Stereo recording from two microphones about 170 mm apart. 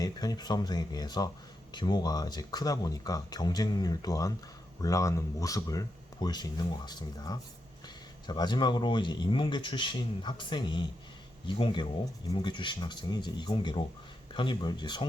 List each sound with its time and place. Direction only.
0.0 s speech: 20° left (ahead or behind)